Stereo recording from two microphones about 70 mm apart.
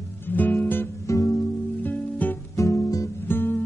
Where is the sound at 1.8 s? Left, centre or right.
Left.